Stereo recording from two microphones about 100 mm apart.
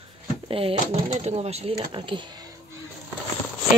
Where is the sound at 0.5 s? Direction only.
70° right (ahead or behind); by 1.8 s 90° right.